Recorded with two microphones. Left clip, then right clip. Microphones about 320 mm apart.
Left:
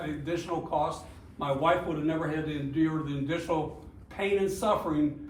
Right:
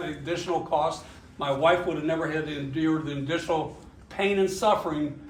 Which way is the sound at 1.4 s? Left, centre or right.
Right.